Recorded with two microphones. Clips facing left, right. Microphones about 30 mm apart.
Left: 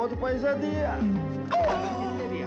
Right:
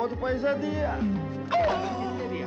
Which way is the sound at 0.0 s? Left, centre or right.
Right.